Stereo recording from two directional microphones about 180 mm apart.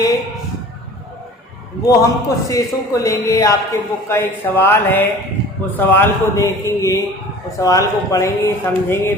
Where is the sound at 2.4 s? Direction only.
20° left (ahead or behind).